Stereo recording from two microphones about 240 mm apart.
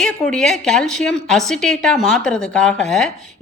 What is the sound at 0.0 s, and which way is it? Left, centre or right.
Speech, centre.